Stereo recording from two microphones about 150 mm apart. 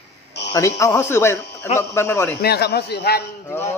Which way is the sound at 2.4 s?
90° left.